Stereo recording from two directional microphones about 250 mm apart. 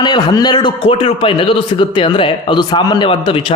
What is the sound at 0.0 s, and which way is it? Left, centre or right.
A man's voice, centre.